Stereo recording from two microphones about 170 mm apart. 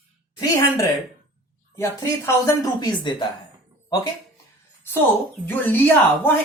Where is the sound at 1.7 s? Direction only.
15° left (ahead or behind).